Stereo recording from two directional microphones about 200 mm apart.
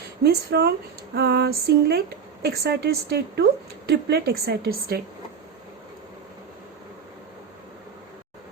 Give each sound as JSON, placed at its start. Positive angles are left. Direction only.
{"t": 0.3, "sound": "a woman's voice", "side_deg": -55}